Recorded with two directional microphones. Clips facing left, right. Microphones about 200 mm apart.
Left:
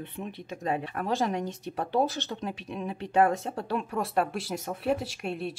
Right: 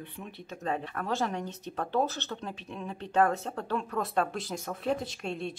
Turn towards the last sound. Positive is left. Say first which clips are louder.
# left 2 dB
turn(degrees=5)  # may be behind; listen again after turning